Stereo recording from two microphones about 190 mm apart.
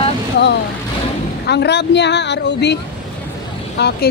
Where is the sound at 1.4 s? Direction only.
60° left (ahead or behind).